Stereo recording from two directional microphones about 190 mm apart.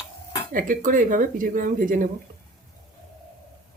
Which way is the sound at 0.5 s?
45° right (ahead or behind).